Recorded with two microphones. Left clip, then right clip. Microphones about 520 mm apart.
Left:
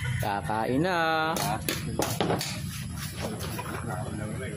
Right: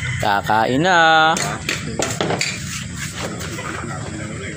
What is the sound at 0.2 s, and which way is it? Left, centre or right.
Speech, left.